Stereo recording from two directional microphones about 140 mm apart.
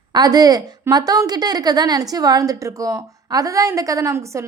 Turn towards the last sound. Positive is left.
turn(degrees=-20)  # may be behind; listen again after turning